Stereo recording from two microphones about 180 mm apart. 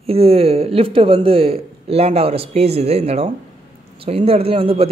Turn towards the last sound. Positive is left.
turn(degrees=-30)  # may be behind; listen again after turning